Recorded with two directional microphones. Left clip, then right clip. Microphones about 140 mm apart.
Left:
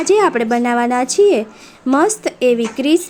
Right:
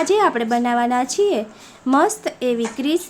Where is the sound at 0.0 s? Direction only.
30° left (ahead or behind).